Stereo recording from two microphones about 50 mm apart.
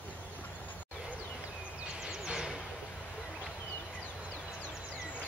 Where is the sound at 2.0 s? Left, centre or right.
Centre.